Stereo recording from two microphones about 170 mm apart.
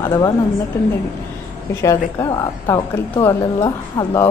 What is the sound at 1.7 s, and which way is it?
A woman's voice, 20° left (ahead or behind).